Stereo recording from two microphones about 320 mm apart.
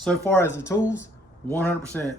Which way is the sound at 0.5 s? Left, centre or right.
Centre.